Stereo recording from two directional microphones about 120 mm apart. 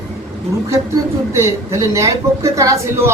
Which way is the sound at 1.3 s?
20° right (ahead or behind).